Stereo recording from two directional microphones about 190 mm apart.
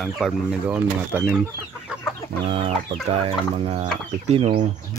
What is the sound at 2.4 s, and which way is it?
Speech, 30° right (ahead or behind).